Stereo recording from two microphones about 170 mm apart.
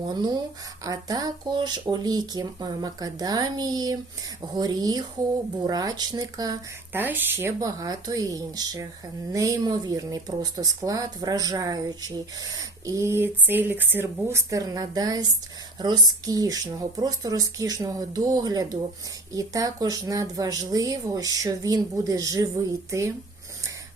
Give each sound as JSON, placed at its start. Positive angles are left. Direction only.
{"t": 0.1, "sound": "speech", "side_deg": -25}
{"t": 7.0, "sound": "speech", "side_deg": -10}